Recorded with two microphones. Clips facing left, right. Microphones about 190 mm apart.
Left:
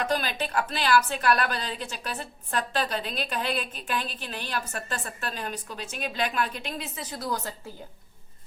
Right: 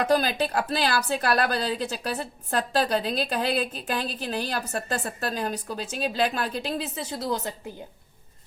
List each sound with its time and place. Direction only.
0.0 s a woman's voice: 35° right (ahead or behind); by 7.7 s 20° right (ahead or behind)